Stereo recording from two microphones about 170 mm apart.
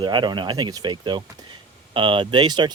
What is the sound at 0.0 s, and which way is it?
Speech, 25° right (ahead or behind).